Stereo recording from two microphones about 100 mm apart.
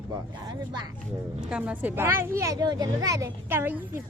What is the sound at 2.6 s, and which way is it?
Speech, 40° right (ahead or behind).